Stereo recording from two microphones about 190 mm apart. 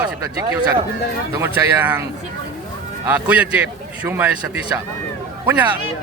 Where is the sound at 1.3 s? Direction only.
15° right (ahead or behind).